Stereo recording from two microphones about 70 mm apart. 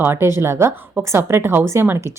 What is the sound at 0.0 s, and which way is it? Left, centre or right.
A woman's voice, right.